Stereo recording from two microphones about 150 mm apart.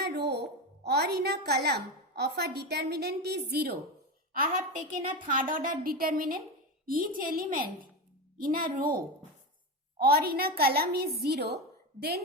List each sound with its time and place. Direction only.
0.0 s music: 90° right
0.9 s a woman's voice: 90° right
4.4 s a woman's voice: 60° right (ahead or behind)
10.0 s a woman's voice: 90° right